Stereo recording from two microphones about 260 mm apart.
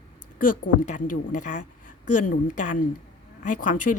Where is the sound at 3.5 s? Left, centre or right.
Left.